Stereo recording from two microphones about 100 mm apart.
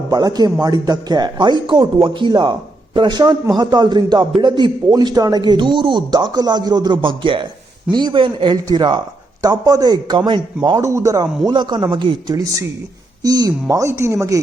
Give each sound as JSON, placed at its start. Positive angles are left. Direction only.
{"t": 0.1, "sound": "speech", "side_deg": -40}
{"t": 9.4, "sound": "speech", "side_deg": -35}
{"t": 10.8, "sound": "speech", "side_deg": -30}
{"t": 12.4, "sound": "speech", "side_deg": -35}